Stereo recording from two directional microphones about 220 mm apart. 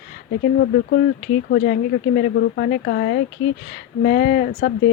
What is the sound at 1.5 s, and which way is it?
Speech, 45° left (ahead or behind).